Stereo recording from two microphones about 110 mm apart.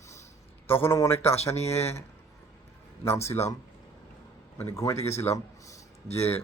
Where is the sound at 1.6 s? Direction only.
70° left (ahead or behind).